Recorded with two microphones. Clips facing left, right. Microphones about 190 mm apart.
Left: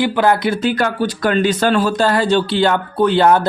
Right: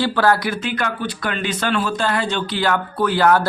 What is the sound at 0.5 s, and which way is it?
Speech, 35° left (ahead or behind).